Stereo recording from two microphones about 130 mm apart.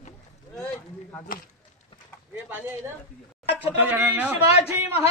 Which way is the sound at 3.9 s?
15° right (ahead or behind).